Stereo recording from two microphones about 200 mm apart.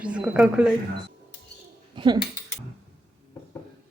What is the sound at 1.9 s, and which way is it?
Speech, 25° right (ahead or behind).